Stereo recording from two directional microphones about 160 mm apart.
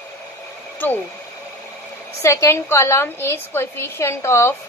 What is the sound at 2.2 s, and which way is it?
A woman's voice, 20° left (ahead or behind).